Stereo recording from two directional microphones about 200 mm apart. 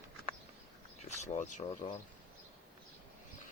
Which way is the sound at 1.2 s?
40° left (ahead or behind).